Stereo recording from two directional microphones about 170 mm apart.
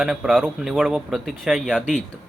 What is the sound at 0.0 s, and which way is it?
Speech, 5° right (ahead or behind).